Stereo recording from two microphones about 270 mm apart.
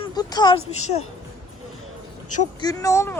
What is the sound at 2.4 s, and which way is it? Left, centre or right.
Speech, centre.